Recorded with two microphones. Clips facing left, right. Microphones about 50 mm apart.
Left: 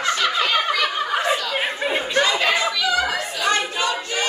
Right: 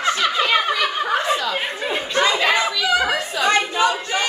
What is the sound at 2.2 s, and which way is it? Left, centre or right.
Chatter, right.